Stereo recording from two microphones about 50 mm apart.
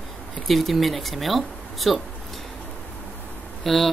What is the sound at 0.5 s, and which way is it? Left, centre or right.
Speech, centre.